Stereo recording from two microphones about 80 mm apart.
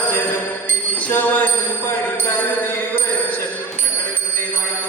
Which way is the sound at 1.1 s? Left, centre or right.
Centre.